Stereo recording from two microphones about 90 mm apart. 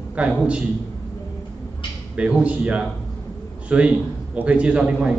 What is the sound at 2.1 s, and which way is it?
A man's voice, 15° right (ahead or behind).